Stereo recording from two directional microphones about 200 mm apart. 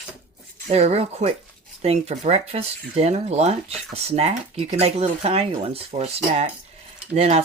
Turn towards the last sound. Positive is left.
turn(degrees=-30)  # may be behind; listen again after turning